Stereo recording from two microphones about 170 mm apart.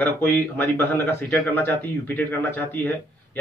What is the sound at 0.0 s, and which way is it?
A man's voice, 10° left (ahead or behind).